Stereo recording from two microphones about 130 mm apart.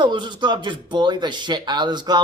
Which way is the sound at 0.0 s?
35° right (ahead or behind).